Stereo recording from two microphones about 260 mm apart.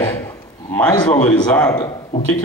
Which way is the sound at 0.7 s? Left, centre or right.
Centre.